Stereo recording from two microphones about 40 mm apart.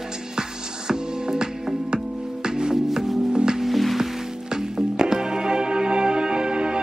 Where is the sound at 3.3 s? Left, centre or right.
Centre.